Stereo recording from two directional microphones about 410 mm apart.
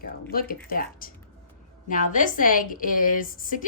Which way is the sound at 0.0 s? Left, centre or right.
Left.